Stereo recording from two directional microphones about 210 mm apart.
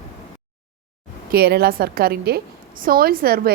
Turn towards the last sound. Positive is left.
turn(degrees=-45)  # may be behind; listen again after turning